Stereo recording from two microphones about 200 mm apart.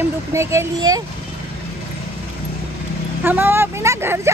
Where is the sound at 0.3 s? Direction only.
15° right (ahead or behind).